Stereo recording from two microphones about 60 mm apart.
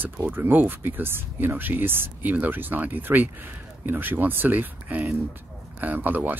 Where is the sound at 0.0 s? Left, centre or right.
Right.